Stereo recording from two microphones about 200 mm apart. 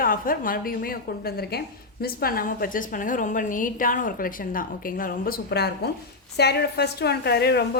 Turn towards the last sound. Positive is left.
turn(degrees=55)  # may be behind; listen again after turning